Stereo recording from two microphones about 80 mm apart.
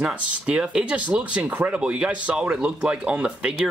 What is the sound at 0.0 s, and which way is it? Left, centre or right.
Speech, centre.